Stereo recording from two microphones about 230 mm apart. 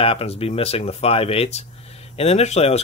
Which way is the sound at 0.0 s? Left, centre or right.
Left.